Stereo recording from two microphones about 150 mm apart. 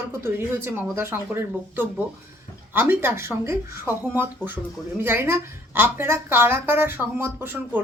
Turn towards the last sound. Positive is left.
turn(degrees=-15)  # may be behind; listen again after turning